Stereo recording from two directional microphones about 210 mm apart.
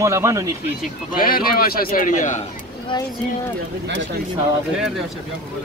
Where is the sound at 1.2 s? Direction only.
45° left (ahead or behind).